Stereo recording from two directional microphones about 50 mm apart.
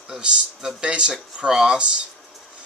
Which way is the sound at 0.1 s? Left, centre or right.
Centre.